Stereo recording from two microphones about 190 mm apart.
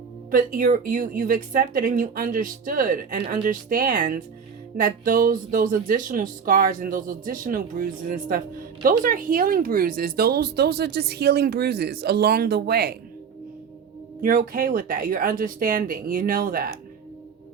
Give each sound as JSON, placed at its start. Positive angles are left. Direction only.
{"t": 0.3, "sound": "speech", "side_deg": -45}
{"t": 14.2, "sound": "speech", "side_deg": -45}